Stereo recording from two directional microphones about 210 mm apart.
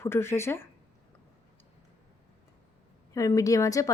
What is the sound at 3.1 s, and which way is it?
Speech, 15° left (ahead or behind).